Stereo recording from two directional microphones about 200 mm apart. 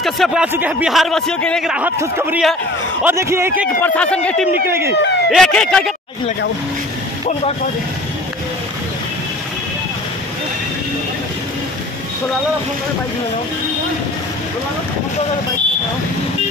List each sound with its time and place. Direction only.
0.0 s a man's voice: centre (ahead or behind)
3.8 s speech: 5° left (ahead or behind)
4.6 s a man's voice: 10° right (ahead or behind)
4.9 s speech: 60° left (ahead or behind)
5.3 s speech: 5° left (ahead or behind)